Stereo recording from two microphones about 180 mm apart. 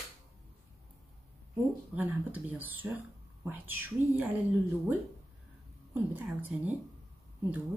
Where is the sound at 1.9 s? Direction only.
10° right (ahead or behind).